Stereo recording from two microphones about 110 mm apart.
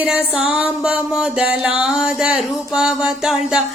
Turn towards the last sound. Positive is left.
turn(degrees=-5)  # may be behind; listen again after turning